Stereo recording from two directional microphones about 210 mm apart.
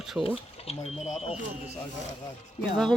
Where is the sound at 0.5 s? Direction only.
30° left (ahead or behind).